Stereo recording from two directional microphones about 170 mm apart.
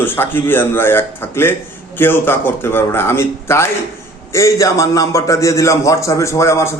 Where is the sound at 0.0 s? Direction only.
10° left (ahead or behind).